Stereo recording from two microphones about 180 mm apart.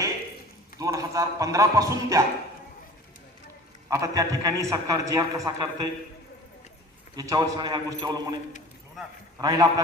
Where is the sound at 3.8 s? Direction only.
20° right (ahead or behind).